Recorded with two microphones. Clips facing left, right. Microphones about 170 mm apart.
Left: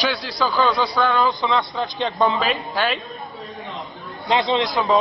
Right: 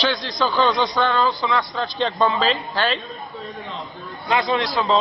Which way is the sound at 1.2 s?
20° left (ahead or behind).